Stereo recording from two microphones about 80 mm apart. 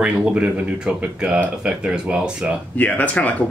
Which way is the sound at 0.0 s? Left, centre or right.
Centre.